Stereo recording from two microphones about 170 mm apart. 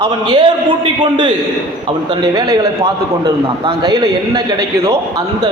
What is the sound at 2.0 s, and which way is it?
Speech, 25° right (ahead or behind).